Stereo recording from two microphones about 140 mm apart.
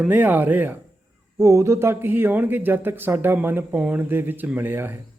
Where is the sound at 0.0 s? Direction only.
15° right (ahead or behind).